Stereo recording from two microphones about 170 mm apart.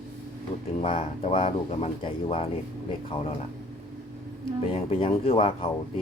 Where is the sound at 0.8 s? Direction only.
35° left (ahead or behind).